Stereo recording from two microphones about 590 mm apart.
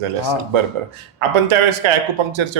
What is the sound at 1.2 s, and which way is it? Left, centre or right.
Speech, right.